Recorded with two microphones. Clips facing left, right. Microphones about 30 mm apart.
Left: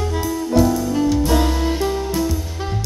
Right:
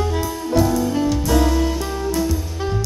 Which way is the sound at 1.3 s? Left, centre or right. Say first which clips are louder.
Right 1 dB; centre.